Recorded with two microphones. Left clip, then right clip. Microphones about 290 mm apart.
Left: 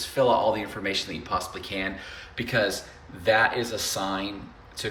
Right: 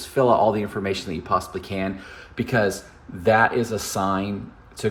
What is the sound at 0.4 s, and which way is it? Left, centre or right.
Speech, centre.